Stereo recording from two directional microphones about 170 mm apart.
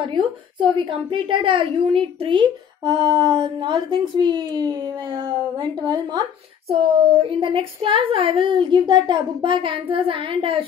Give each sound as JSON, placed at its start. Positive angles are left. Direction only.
{"t": 0.0, "sound": "a woman's voice", "side_deg": -30}